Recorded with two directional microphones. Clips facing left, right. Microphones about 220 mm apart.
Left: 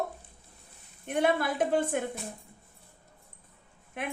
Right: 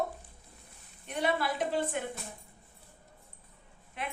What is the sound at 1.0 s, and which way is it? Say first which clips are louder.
Speech: left 4 dB; 50° left (ahead or behind).